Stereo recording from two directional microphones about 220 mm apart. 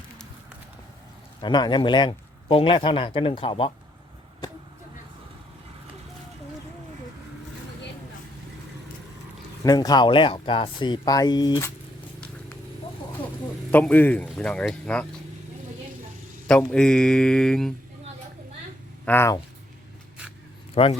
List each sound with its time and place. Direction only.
1.4 s speech: 20° left (ahead or behind)
9.6 s speech: 15° left (ahead or behind)
13.7 s a man's voice: 5° left (ahead or behind)
16.5 s a man's voice: 5° left (ahead or behind)
19.0 s speech: 10° left (ahead or behind)
20.8 s speech: 25° left (ahead or behind)